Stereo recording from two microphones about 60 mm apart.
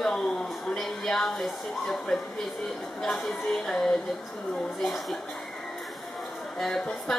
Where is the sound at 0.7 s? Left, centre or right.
Centre.